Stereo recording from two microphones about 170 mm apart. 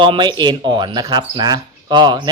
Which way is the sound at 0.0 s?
30° right (ahead or behind).